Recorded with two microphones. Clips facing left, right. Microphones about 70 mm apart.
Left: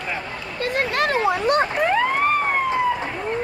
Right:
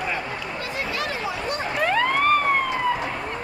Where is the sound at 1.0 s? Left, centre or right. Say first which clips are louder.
Left 8 dB; left.